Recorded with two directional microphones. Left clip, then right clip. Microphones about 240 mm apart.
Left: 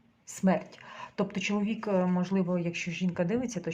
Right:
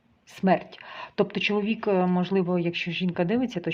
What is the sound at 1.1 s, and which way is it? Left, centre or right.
Speech, right.